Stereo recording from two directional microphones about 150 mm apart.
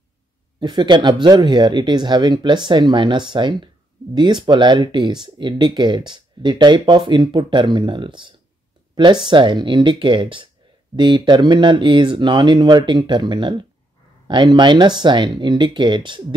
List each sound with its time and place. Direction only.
0.6 s speech: 30° right (ahead or behind)